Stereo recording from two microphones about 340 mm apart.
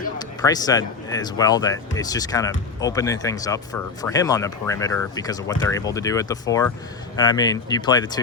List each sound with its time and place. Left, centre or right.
0.2 s speech: centre